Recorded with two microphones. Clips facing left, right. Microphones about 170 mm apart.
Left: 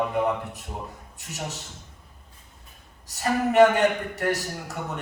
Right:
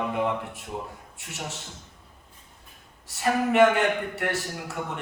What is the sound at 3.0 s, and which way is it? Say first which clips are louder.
Speech: even; 40° left (ahead or behind).